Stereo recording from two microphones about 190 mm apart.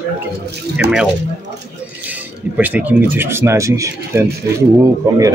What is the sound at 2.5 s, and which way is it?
Speech, 10° right (ahead or behind).